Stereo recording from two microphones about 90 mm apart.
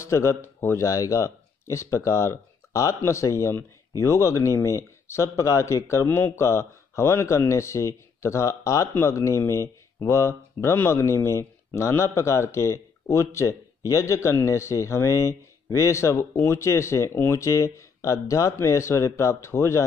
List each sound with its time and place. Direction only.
0.0 s speech: 30° left (ahead or behind)